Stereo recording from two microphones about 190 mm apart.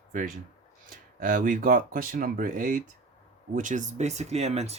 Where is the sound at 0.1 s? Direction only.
45° right (ahead or behind).